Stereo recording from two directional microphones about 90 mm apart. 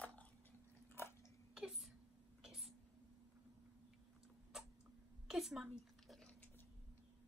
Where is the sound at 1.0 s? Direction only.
25° left (ahead or behind).